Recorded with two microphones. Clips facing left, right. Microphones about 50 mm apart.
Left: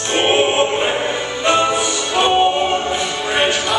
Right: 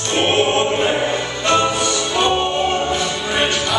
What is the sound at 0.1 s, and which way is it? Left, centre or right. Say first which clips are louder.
Music: left 1 dB; centre.